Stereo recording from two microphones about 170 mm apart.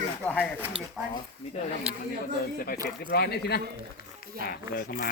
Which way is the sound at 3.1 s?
70° left (ahead or behind).